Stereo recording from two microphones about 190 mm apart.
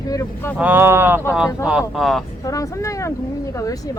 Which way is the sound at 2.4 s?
20° left (ahead or behind).